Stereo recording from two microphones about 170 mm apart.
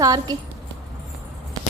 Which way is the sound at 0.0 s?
20° right (ahead or behind).